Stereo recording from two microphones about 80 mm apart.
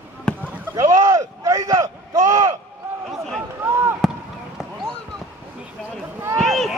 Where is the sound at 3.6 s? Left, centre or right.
Right.